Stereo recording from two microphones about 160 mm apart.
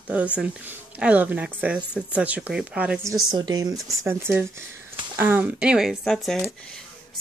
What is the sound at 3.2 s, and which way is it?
A woman's voice, 25° right (ahead or behind).